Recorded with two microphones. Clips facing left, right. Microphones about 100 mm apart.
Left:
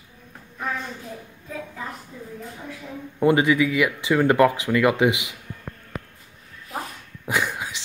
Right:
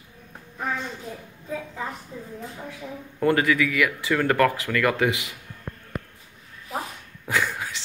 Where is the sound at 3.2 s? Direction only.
20° left (ahead or behind).